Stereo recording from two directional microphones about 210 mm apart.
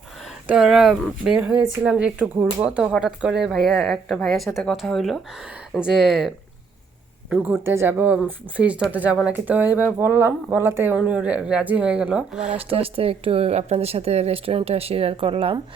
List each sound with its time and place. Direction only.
0.4 s speech: 5° right (ahead or behind)
12.5 s speech: 25° right (ahead or behind)